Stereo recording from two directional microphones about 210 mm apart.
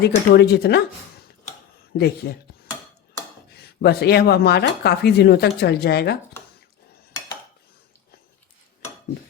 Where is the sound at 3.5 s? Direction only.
50° left (ahead or behind).